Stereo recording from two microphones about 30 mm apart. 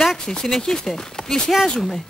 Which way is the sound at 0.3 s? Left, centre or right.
Centre.